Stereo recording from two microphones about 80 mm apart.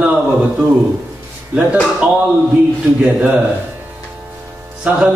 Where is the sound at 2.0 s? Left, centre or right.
Centre.